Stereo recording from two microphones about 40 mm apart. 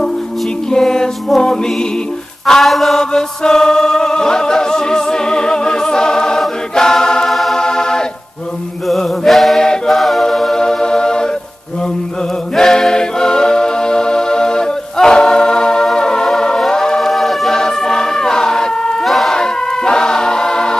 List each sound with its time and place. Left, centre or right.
0.7 s music: centre
2.4 s a sound: centre
3.0 s a capella: centre
6.7 s choir: centre
7.2 s music: centre
7.5 s music: centre
8.8 s mantra: centre
9.8 s a capella: centre
10.6 s music: centre
12.5 s music: centre
17.1 s music: centre
17.6 s choir: centre
19.0 s emergency vehicle: centre
19.3 s choir: centre